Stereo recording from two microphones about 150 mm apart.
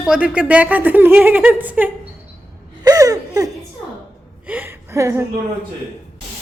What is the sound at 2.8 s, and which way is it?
Laughter, 25° right (ahead or behind).